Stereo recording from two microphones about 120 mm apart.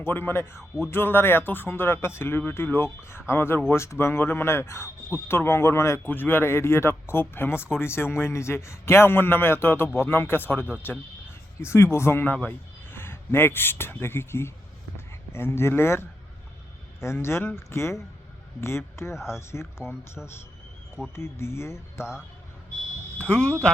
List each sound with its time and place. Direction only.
0.0 s a man's voice: 20° left (ahead or behind)
21.2 s speech: 20° left (ahead or behind)
23.1 s speech: 10° left (ahead or behind)